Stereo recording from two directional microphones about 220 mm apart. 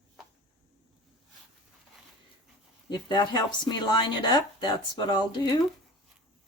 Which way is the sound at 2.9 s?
20° left (ahead or behind).